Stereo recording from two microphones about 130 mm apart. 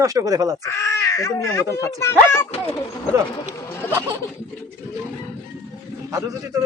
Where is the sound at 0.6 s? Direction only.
20° left (ahead or behind).